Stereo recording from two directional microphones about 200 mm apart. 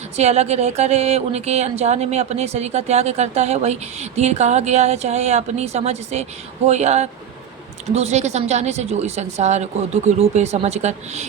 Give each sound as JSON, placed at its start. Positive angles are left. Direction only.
{"t": 0.2, "sound": "speech", "side_deg": -30}